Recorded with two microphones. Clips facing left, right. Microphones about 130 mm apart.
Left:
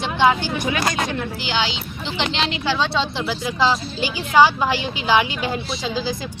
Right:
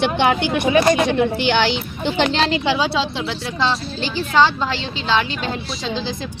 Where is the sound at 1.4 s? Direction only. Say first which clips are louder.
Right 6 dB; 60° right (ahead or behind); by 2.5 s 40° right (ahead or behind).